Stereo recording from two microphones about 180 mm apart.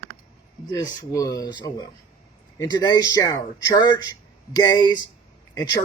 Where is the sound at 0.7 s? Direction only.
20° left (ahead or behind).